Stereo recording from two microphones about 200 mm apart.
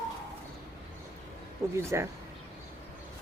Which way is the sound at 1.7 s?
15° right (ahead or behind).